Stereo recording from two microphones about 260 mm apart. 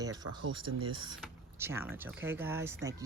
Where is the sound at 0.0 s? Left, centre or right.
Centre.